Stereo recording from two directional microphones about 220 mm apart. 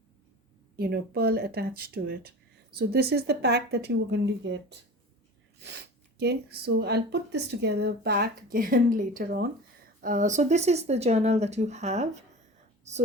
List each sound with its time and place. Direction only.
0.8 s speech: 45° right (ahead or behind); by 12.2 s 30° right (ahead or behind)